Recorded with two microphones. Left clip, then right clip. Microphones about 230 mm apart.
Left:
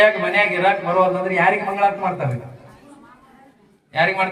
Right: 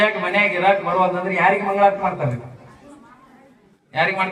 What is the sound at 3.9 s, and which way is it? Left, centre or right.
Speech, left.